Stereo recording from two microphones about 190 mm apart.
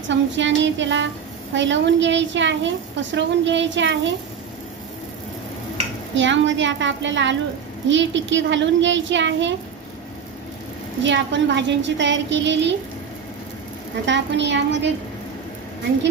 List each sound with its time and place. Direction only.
0.1 s a woman's voice: 70° right (ahead or behind)
6.1 s a woman's voice: 75° right (ahead or behind)
11.1 s a woman's voice: 70° right (ahead or behind)
14.0 s a woman's voice: 70° right (ahead or behind)